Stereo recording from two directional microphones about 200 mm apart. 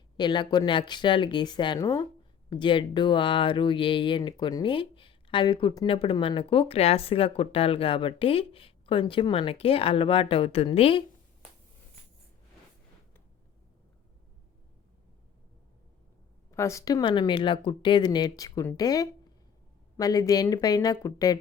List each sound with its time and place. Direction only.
0.2 s speech: 20° left (ahead or behind)
16.5 s speech: 15° left (ahead or behind)